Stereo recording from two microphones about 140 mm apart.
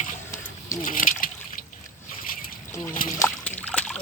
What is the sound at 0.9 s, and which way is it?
Splash, 70° left (ahead or behind).